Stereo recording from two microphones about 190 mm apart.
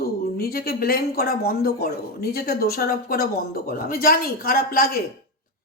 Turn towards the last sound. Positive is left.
turn(degrees=50)  # may be behind; listen again after turning